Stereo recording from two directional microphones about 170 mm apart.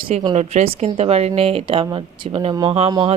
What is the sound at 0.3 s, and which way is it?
Speech, 40° right (ahead or behind).